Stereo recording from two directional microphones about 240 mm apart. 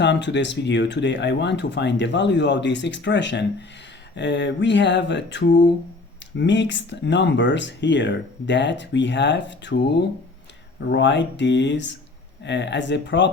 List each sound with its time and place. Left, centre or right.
0.0 s speech: left